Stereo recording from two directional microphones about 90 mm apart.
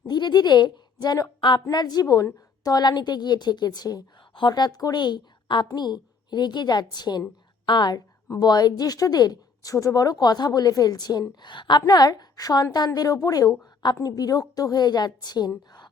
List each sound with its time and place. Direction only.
0.1 s a woman's voice: 55° left (ahead or behind)
1.4 s a woman's voice: 65° left (ahead or behind)
1.7 s speech: 50° left (ahead or behind)